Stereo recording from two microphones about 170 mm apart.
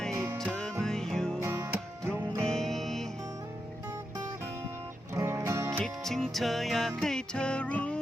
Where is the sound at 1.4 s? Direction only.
15° right (ahead or behind).